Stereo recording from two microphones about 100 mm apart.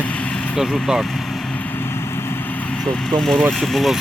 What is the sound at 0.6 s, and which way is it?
Speech, 5° right (ahead or behind).